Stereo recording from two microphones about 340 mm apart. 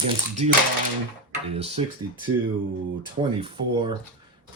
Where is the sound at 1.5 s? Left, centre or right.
Centre.